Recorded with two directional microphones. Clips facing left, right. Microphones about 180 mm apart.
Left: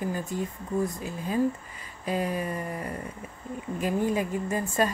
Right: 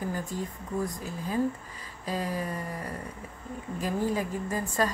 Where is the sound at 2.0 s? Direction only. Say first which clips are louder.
Left 3 dB; 15° left (ahead or behind).